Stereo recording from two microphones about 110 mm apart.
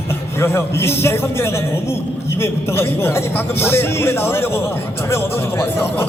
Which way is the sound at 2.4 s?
20° left (ahead or behind).